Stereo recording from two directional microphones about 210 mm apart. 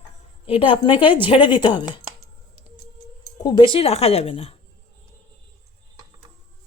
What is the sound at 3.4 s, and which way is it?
Speech, 20° left (ahead or behind).